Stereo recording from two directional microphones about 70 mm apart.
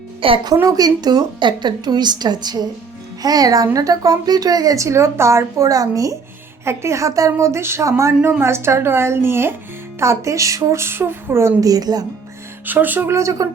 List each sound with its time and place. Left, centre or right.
0.5 s a woman's voice: right
3.2 s a woman's voice: right
6.7 s a woman's voice: right
10.0 s a woman's voice: right
11.6 s a woman's voice: right
12.6 s speech: right
13.1 s a woman's voice: right